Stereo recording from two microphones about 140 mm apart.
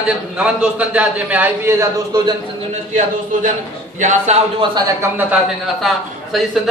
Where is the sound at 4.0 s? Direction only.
60° right (ahead or behind).